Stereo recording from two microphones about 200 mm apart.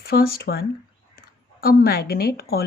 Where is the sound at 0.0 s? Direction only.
50° left (ahead or behind).